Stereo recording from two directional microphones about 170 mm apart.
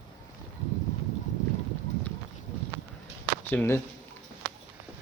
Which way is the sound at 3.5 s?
10° left (ahead or behind).